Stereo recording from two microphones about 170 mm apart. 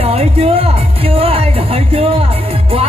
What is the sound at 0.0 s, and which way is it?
Music, 35° right (ahead or behind).